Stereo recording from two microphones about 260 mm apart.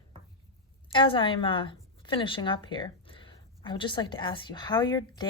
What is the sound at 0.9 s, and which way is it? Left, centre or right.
Speech, centre.